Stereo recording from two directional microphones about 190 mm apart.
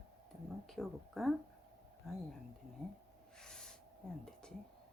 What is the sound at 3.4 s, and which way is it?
Owl, 5° left (ahead or behind).